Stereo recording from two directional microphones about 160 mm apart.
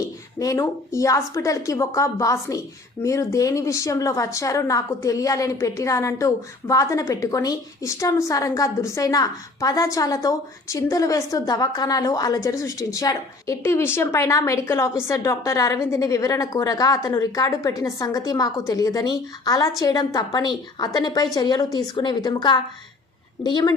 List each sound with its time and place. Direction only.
0.3 s a woman's voice: 20° left (ahead or behind)